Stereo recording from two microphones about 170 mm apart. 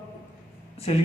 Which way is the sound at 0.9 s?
35° left (ahead or behind).